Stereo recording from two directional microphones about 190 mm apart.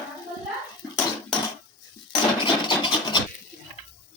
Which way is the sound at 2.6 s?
25° left (ahead or behind).